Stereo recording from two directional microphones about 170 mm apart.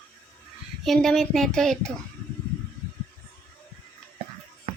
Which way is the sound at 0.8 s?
Centre (ahead or behind).